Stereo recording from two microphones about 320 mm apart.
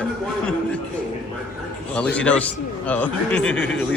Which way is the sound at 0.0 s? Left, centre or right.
Centre.